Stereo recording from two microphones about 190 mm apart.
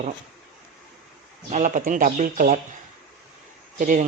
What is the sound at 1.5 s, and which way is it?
Speech, 40° right (ahead or behind).